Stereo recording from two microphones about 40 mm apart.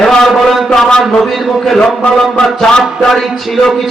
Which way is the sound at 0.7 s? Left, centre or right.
Centre.